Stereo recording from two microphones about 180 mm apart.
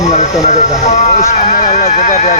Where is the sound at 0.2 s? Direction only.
40° left (ahead or behind).